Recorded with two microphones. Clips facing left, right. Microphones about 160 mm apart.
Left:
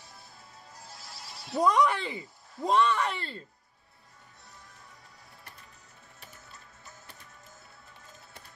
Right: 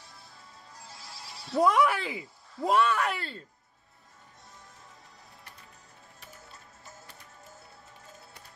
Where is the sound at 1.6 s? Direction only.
5° right (ahead or behind).